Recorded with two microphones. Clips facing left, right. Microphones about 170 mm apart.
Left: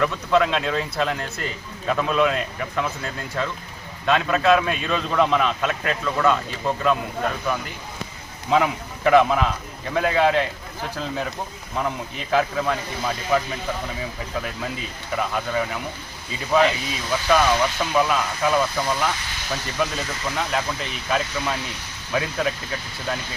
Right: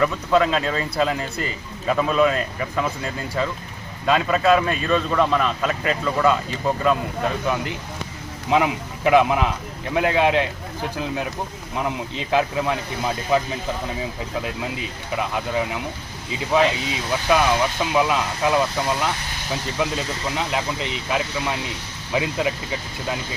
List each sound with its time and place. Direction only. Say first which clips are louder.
0.0 s speech: right 1 dB; 5° right (ahead or behind)
8.4 s speech: even; 15° right (ahead or behind)
14.4 s speech: right 2 dB; 15° right (ahead or behind)
19.8 s speech: right 1 dB; 15° right (ahead or behind)